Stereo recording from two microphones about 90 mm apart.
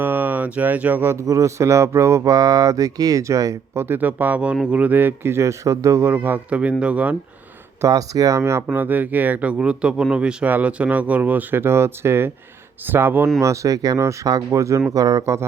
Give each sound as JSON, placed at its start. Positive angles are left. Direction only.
{"t": 0.0, "sound": "speech", "side_deg": -20}
{"t": 3.8, "sound": "speech", "side_deg": -25}
{"t": 7.8, "sound": "speech", "side_deg": -40}
{"t": 13.4, "sound": "speech", "side_deg": -35}